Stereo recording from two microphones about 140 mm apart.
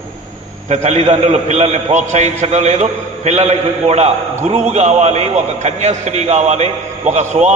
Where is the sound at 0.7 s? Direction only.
50° right (ahead or behind).